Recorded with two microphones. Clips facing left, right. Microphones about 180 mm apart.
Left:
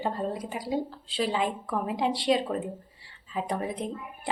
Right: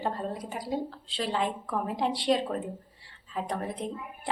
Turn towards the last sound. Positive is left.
turn(degrees=5)  # may be behind; listen again after turning